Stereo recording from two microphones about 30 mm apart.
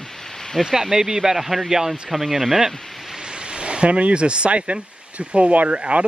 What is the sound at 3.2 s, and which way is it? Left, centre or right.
Speech, right.